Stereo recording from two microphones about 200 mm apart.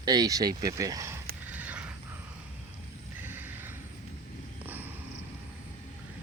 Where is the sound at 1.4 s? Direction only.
10° right (ahead or behind).